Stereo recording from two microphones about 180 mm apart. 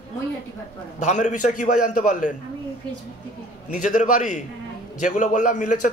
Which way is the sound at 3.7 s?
45° left (ahead or behind).